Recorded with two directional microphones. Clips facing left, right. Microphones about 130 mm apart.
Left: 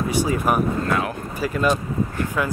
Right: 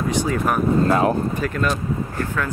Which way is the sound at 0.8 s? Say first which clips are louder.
Right 6 dB; 35° right (ahead or behind).